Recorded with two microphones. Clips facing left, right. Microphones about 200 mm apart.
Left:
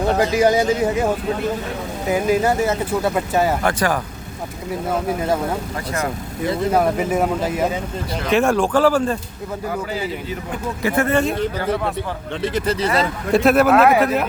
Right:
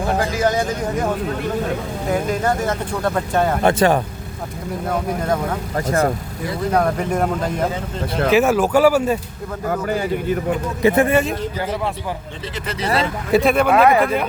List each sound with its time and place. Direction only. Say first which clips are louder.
0.2 s speech: left 3 dB; 15° left (ahead or behind)
2.0 s speech: left 3 dB; 5° left (ahead or behind)
3.6 s speech: right 5 dB; 25° right (ahead or behind)
4.9 s speech: even; 5° left (ahead or behind)
6.7 s speech: right 1 dB; 5° left (ahead or behind)
9.6 s speech: right 5 dB; 55° right (ahead or behind)
10.8 s speech: right 3 dB; 15° right (ahead or behind)
13.3 s speech: left 1 dB; centre (ahead or behind)